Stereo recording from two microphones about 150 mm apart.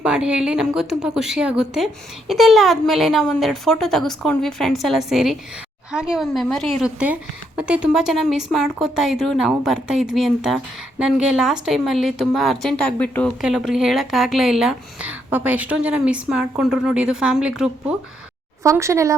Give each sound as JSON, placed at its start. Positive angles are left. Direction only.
{"t": 0.0, "sound": "a woman's voice", "side_deg": -5}
{"t": 13.4, "sound": "a woman's voice", "side_deg": -5}
{"t": 18.6, "sound": "a woman's voice", "side_deg": -20}